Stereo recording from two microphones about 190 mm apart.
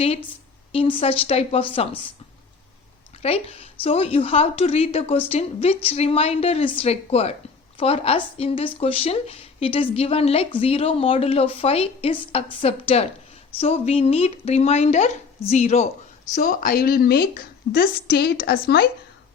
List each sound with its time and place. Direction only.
0.7 s speech: 30° left (ahead or behind)
3.2 s a woman's voice: 30° left (ahead or behind); by 18.9 s 55° left (ahead or behind)